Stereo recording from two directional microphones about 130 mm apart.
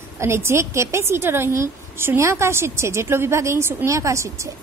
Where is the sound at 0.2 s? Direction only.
20° right (ahead or behind).